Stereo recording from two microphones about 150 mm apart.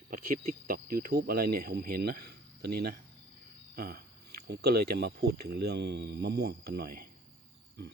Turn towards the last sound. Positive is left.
turn(degrees=-90)